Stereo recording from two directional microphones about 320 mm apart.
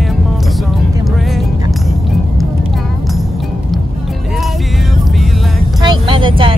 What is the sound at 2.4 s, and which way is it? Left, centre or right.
Vehicle, centre.